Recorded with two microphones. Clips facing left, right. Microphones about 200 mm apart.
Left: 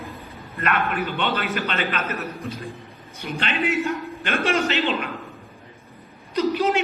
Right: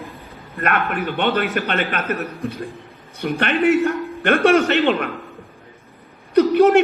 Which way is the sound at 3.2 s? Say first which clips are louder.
Right 7 dB; 60° right (ahead or behind).